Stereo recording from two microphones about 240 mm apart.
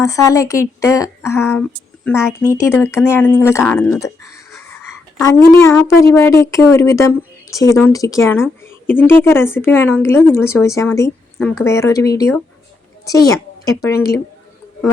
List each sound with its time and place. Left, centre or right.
0.0 s speech: centre
5.5 s speech: centre
11.3 s speech: centre
11.6 s speech: centre